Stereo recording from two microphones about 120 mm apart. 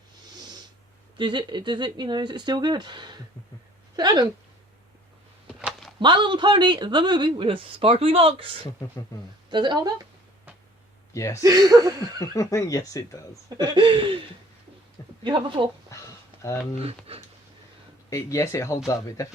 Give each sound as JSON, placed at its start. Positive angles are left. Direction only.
{"t": 0.3, "sound": "snort", "side_deg": -35}
{"t": 1.2, "sound": "speech", "side_deg": -40}
{"t": 6.0, "sound": "speech", "side_deg": -40}
{"t": 11.1, "sound": "speech", "side_deg": 25}
{"t": 11.4, "sound": "speech", "side_deg": -30}
{"t": 12.3, "sound": "speech", "side_deg": 25}
{"t": 13.6, "sound": "a sound", "side_deg": -40}
{"t": 15.9, "sound": "a sound", "side_deg": 25}
{"t": 16.4, "sound": "speech", "side_deg": 25}
{"t": 17.1, "sound": "a sound", "side_deg": -50}
{"t": 18.1, "sound": "speech", "side_deg": 25}